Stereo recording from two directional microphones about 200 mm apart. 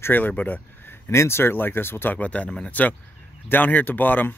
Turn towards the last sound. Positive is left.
turn(degrees=10)  # may be behind; listen again after turning